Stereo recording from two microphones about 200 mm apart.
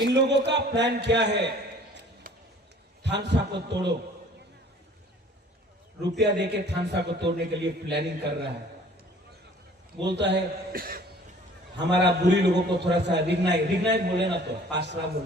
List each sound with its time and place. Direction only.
0.1 s a man's voice: 60° right (ahead or behind)
2.3 s a sound: 45° right (ahead or behind)
3.0 s a man's voice: 60° right (ahead or behind)
6.0 s a man's voice: 60° right (ahead or behind)
10.1 s a man's voice: 60° right (ahead or behind)
11.8 s a man's voice: 60° right (ahead or behind)